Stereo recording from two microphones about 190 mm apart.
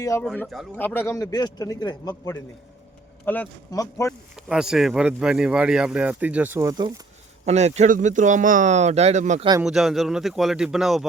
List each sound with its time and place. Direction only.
0.0 s a man's voice: 15° left (ahead or behind)
0.3 s a man's voice: centre (ahead or behind); by 2.3 s 20° left (ahead or behind)
3.2 s a man's voice: 10° left (ahead or behind)
4.4 s speech: 5° right (ahead or behind); by 7.0 s 20° right (ahead or behind)
7.4 s a man's voice: 35° right (ahead or behind)
9.6 s speech: centre (ahead or behind)